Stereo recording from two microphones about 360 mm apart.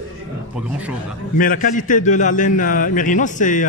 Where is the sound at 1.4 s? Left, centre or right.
Left.